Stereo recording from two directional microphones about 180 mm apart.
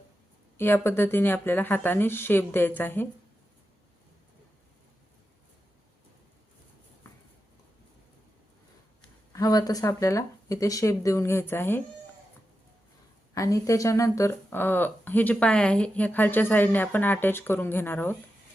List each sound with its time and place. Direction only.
0.5 s speech: 15° left (ahead or behind)
9.3 s speech: 20° left (ahead or behind)
13.3 s speech: 15° left (ahead or behind)